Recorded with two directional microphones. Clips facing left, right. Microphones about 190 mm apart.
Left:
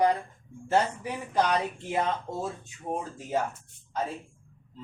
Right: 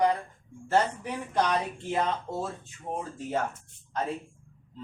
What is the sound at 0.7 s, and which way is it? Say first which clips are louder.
Speech: even; 10° left (ahead or behind).